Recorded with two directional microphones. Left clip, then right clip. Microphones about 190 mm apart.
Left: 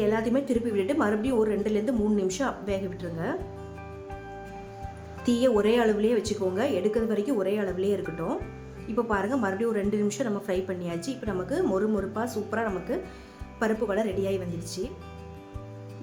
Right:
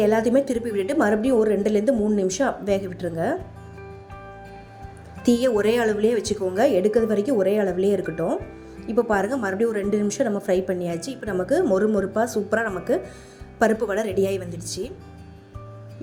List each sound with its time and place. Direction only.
0.0 s a woman's voice: 25° right (ahead or behind)
5.2 s a woman's voice: 25° right (ahead or behind)
8.0 s speech: 5° right (ahead or behind)
8.9 s a woman's voice: 25° right (ahead or behind)